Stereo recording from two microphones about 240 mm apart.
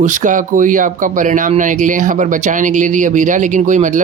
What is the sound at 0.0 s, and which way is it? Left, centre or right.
Speech, right.